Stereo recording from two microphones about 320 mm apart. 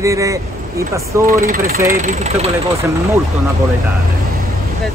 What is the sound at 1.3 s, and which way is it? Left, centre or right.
Speech, right.